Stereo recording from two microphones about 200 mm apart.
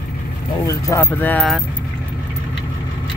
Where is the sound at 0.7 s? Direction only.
15° left (ahead or behind).